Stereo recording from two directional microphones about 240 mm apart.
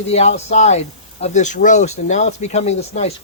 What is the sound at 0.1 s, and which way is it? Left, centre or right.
Speech, left.